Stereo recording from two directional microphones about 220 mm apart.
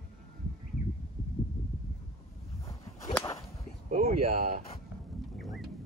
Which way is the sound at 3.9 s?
30° right (ahead or behind).